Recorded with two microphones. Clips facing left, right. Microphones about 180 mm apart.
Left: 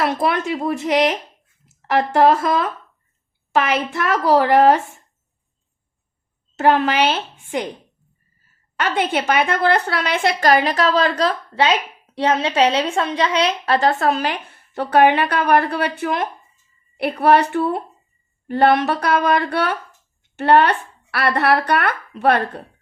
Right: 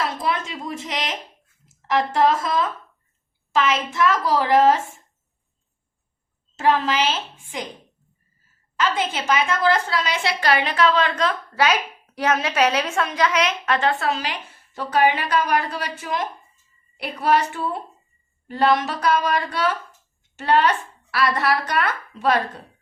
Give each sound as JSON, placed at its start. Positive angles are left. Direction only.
{"t": 0.0, "sound": "a woman's voice", "side_deg": 65}
{"t": 6.6, "sound": "a woman's voice", "side_deg": 65}
{"t": 8.7, "sound": "a woman's voice", "side_deg": 65}